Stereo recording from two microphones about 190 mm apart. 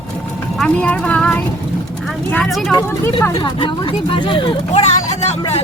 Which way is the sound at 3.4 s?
25° left (ahead or behind).